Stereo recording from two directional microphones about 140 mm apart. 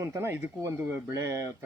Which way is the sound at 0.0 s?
20° right (ahead or behind).